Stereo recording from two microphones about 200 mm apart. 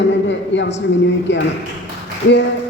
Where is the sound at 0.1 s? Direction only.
65° left (ahead or behind).